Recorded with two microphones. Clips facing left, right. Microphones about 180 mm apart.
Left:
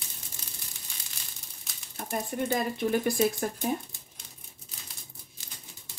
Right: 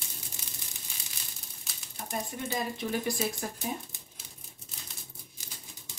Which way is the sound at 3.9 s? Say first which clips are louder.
Right 1 dB; 20° right (ahead or behind).